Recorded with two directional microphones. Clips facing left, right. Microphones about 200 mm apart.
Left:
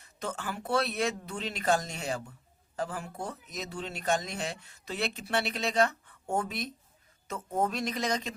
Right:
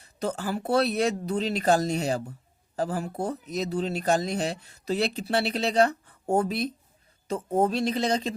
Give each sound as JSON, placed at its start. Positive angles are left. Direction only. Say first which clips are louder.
{"t": 0.0, "sound": "speech", "louder": "right 7 dB", "side_deg": -35}